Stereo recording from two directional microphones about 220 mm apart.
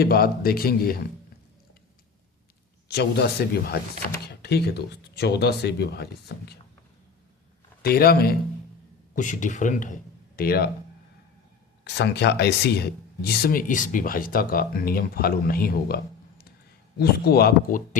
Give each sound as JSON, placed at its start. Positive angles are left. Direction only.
{"t": 0.0, "sound": "speech", "side_deg": 45}
{"t": 2.9, "sound": "speech", "side_deg": 50}
{"t": 7.8, "sound": "a man's voice", "side_deg": 45}
{"t": 11.9, "sound": "speech", "side_deg": 50}
{"t": 17.0, "sound": "speech", "side_deg": 45}